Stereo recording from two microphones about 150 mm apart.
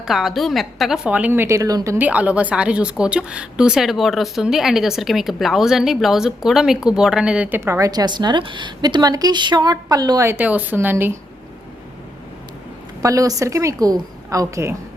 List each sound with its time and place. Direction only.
0.0 s a woman's voice: centre (ahead or behind)
13.0 s a woman's voice: 20° right (ahead or behind)